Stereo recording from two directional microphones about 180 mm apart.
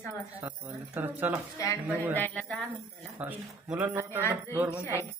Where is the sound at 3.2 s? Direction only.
10° right (ahead or behind).